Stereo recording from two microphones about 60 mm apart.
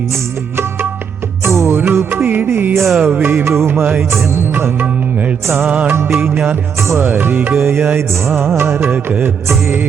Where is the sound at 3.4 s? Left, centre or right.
Right.